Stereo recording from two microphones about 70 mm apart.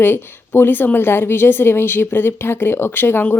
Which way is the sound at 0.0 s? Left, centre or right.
Left.